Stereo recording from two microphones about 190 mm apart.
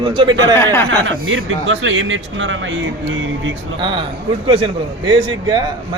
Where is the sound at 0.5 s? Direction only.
15° left (ahead or behind).